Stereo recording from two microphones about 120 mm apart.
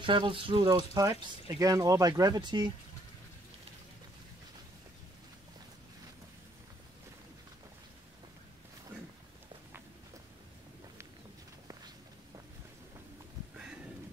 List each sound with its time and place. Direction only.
0.0 s speech: 45° right (ahead or behind)